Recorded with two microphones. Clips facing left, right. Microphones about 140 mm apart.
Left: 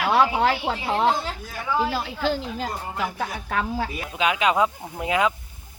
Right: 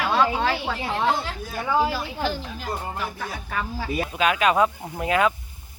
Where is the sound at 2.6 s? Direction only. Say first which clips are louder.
Left 1 dB; 80° left.